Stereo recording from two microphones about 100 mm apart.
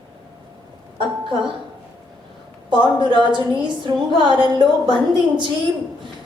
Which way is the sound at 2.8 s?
50° right (ahead or behind).